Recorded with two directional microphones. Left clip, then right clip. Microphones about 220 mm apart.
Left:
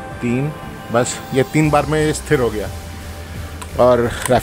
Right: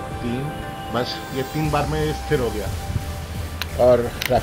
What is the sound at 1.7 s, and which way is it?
Speech, 60° left (ahead or behind).